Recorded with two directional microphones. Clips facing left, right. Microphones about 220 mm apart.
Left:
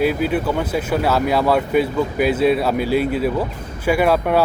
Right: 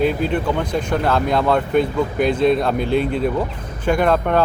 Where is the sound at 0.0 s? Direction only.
5° left (ahead or behind).